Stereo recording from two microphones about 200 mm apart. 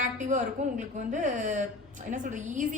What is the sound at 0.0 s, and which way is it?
A woman's voice, 40° right (ahead or behind).